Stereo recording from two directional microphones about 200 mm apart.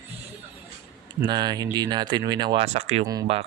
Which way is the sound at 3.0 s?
20° right (ahead or behind).